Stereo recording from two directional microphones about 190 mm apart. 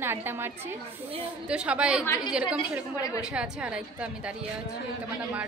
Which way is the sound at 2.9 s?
15° left (ahead or behind).